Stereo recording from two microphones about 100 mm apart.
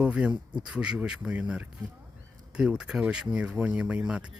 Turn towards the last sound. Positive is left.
turn(degrees=-10)  # may be behind; listen again after turning